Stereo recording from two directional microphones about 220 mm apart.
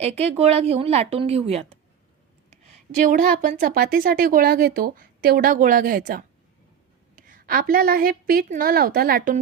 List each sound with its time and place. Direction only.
0.0 s a woman's voice: 30° right (ahead or behind)
3.0 s a woman's voice: 35° right (ahead or behind)